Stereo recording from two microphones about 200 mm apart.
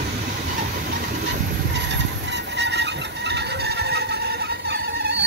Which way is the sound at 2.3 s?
60° right (ahead or behind).